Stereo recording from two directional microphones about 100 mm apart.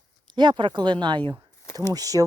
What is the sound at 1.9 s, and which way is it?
Speech, 35° right (ahead or behind).